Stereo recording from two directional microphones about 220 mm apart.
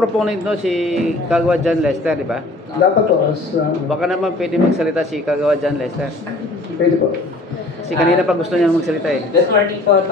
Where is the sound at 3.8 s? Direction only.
Centre (ahead or behind).